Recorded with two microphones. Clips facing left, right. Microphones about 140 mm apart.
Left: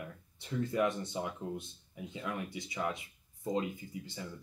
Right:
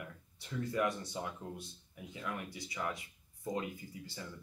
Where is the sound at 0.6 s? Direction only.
25° left (ahead or behind).